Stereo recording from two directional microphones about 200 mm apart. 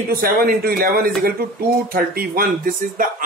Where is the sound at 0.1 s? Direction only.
50° right (ahead or behind).